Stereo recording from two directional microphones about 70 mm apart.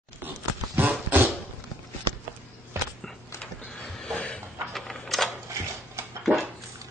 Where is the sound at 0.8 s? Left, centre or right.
Right.